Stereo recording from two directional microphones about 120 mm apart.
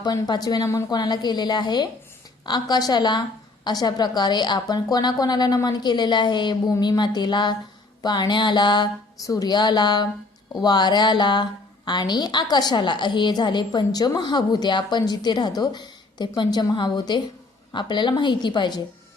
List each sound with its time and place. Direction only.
0.0 s a woman's voice: 35° left (ahead or behind)